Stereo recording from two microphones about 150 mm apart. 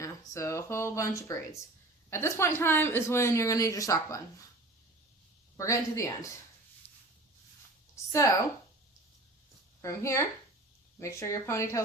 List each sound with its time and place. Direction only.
0.0 s speech: 20° left (ahead or behind)
5.5 s speech: 20° left (ahead or behind)
6.8 s a sound: 15° left (ahead or behind)
9.8 s speech: 20° left (ahead or behind)